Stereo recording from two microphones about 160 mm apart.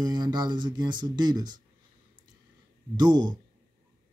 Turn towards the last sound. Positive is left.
turn(degrees=-25)  # may be behind; listen again after turning